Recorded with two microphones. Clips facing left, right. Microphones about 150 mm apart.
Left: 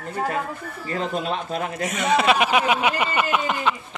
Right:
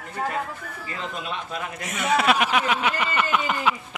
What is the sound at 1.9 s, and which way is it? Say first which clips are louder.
Speech: left 1 dB; 5° right (ahead or behind).